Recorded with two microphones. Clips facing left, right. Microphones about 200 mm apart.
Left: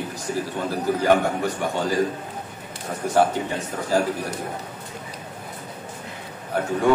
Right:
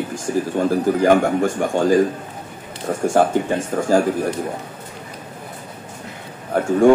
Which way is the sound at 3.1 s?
50° right (ahead or behind).